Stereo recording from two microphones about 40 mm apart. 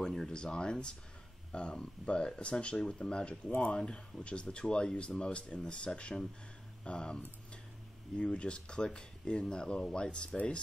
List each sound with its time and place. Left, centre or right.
0.0 s speech: centre